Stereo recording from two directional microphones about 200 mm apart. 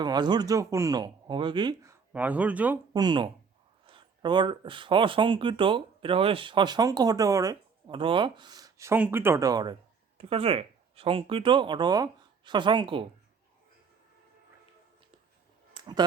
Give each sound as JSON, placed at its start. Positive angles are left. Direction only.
{"t": 0.0, "sound": "speech", "side_deg": -20}
{"t": 2.9, "sound": "speech", "side_deg": -20}
{"t": 15.7, "sound": "a sound", "side_deg": -20}